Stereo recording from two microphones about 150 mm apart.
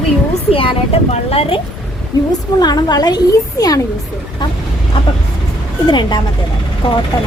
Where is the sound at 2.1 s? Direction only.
25° left (ahead or behind).